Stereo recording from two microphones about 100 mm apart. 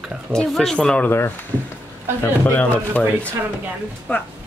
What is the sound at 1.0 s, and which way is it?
Speech, 25° left (ahead or behind).